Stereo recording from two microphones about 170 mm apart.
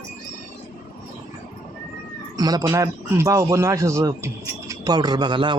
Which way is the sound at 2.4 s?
20° right (ahead or behind).